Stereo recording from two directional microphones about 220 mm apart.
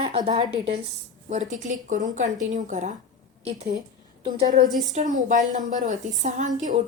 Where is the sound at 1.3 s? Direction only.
35° right (ahead or behind).